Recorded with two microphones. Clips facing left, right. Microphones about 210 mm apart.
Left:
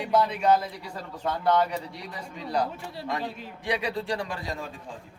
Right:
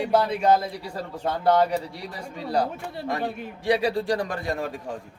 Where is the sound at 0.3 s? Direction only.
30° right (ahead or behind).